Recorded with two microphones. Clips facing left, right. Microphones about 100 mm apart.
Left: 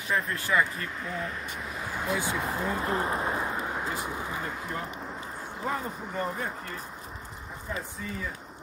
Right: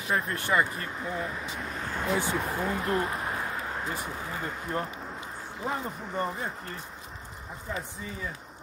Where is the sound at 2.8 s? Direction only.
30° left (ahead or behind).